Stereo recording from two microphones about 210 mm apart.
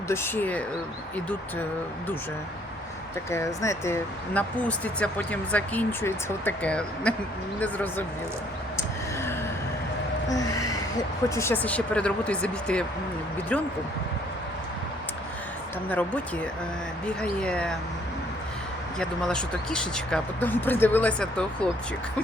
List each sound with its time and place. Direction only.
0.1 s speech: 10° left (ahead or behind)
3.2 s speech: 15° left (ahead or behind)
10.2 s a sound: 15° left (ahead or behind)
11.3 s speech: 10° left (ahead or behind)
15.9 s speech: 5° left (ahead or behind)
18.9 s speech: 5° left (ahead or behind)